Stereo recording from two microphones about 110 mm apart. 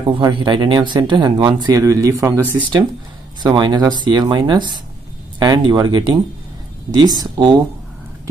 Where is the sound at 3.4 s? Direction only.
40° right (ahead or behind).